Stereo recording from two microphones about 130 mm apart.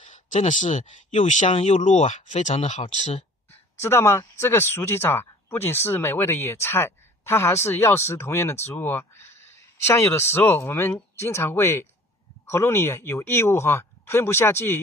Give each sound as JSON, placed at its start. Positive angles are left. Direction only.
{"t": 0.0, "sound": "speech", "side_deg": 65}
{"t": 1.5, "sound": "speech", "side_deg": 55}
{"t": 3.8, "sound": "speech", "side_deg": 20}